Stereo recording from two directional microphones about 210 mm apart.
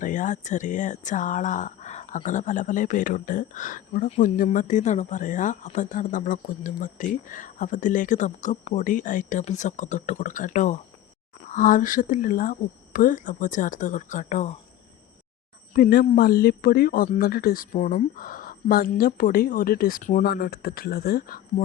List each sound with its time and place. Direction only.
0.0 s speech: 40° left (ahead or behind)
15.7 s speech: 45° left (ahead or behind)